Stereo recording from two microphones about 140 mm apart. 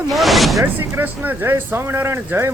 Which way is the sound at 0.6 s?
15° right (ahead or behind).